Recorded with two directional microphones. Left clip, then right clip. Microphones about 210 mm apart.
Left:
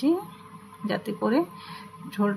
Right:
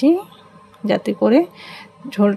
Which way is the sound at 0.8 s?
30° right (ahead or behind).